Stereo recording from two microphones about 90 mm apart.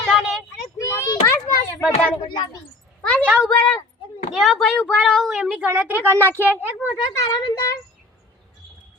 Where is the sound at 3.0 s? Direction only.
15° left (ahead or behind).